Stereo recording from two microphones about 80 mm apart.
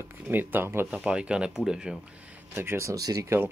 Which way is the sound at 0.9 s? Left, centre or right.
Centre.